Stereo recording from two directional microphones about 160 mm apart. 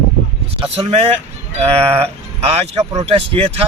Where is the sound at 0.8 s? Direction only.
40° right (ahead or behind).